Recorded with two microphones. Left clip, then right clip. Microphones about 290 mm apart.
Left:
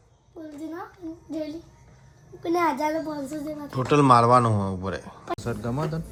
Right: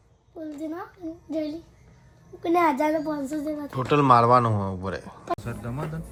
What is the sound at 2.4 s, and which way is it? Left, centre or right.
Speech, right.